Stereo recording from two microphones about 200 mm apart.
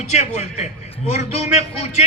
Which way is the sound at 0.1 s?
35° left (ahead or behind).